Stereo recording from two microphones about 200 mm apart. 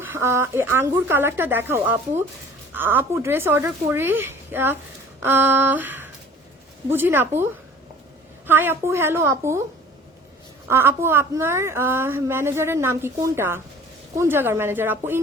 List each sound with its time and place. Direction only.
0.0 s a woman's voice: 10° right (ahead or behind)
10.7 s a woman's voice: 10° right (ahead or behind)